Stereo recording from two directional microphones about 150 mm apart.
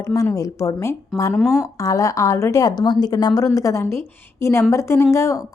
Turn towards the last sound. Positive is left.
turn(degrees=20)  # may be behind; listen again after turning